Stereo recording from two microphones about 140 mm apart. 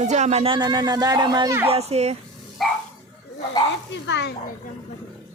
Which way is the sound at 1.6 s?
45° right (ahead or behind).